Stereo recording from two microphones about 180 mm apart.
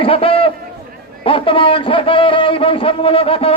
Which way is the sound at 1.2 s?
30° left (ahead or behind).